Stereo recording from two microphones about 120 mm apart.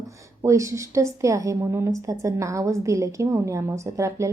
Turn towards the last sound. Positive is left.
turn(degrees=-25)  # may be behind; listen again after turning